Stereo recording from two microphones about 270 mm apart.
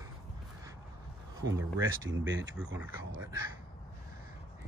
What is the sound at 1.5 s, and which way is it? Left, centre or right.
Speech, centre.